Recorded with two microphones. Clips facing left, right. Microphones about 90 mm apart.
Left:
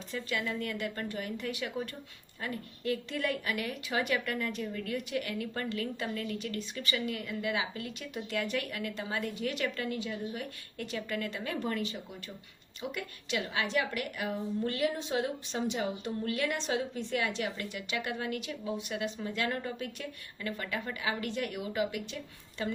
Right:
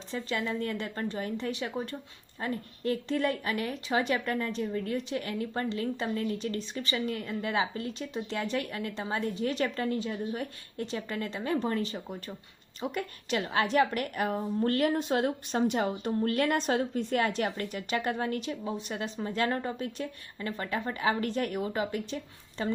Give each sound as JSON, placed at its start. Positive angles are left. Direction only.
{"t": 0.1, "sound": "a woman's voice", "side_deg": -30}